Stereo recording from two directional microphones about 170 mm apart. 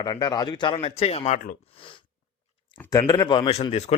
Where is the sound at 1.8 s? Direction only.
30° left (ahead or behind).